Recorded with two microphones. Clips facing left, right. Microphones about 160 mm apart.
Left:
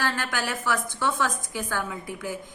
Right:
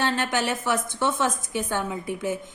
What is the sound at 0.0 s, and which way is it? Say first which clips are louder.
A woman's voice: right 4 dB; 20° right (ahead or behind).